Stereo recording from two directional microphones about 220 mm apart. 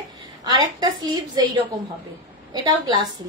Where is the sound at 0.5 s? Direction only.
20° right (ahead or behind).